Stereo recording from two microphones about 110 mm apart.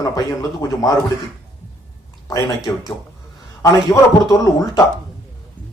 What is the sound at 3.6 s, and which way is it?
A man's voice, 25° left (ahead or behind).